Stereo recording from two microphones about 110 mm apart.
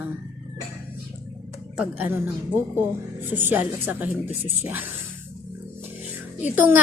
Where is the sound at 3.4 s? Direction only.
20° right (ahead or behind).